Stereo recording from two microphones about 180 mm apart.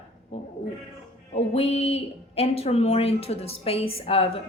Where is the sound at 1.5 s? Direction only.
35° left (ahead or behind).